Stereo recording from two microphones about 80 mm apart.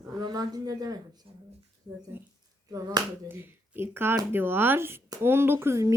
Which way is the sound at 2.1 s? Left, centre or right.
Right.